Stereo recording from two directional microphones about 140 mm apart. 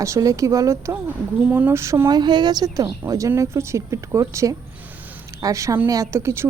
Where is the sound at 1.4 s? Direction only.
10° right (ahead or behind).